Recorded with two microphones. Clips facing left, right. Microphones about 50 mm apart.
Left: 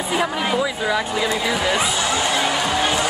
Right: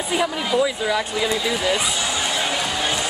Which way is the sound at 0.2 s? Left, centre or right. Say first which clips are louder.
Left 1 dB; left.